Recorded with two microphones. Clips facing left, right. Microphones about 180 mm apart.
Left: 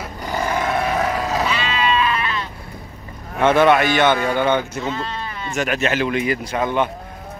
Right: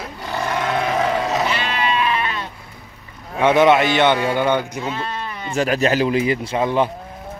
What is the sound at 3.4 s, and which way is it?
Speech, 15° right (ahead or behind).